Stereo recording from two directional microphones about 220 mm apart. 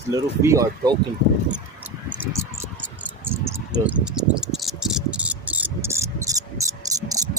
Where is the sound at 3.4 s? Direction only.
5° right (ahead or behind).